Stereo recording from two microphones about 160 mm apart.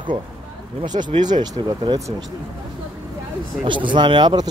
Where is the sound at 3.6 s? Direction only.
30° right (ahead or behind).